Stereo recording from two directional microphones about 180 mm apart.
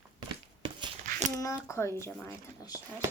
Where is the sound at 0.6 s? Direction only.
30° right (ahead or behind).